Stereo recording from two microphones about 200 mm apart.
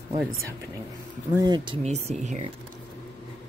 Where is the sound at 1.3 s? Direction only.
20° right (ahead or behind).